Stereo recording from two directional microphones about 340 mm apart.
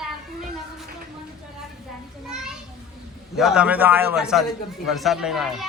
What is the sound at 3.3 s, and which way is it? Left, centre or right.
A man's voice, centre.